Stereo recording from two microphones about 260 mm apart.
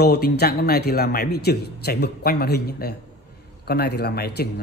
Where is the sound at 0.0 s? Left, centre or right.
Left.